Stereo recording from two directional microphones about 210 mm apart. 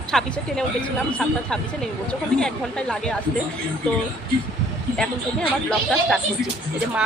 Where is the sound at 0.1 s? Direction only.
5° left (ahead or behind).